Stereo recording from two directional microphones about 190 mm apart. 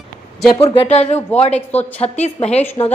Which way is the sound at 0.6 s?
30° left (ahead or behind).